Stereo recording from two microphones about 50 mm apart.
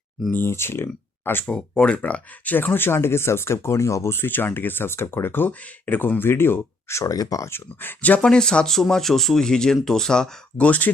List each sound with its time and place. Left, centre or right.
0.3 s speech: left
1.5 s speech: left
7.8 s speech: left
8.2 s speech: centre
10.6 s speech: left